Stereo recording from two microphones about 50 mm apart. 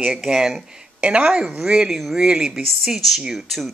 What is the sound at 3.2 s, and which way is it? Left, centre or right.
Speech, centre.